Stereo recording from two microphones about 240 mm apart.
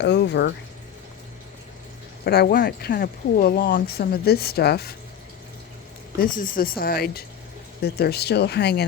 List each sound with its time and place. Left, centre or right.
0.0 s speech: left
2.2 s speech: left
6.1 s speech: left